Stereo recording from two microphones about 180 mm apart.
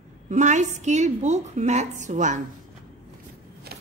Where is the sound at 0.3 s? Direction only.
40° right (ahead or behind).